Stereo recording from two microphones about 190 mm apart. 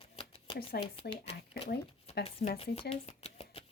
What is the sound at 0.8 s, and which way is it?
Speech, 30° left (ahead or behind).